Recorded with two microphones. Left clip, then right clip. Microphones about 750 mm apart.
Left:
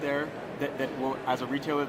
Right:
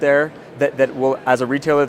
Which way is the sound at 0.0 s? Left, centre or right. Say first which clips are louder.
Right 15 dB; right.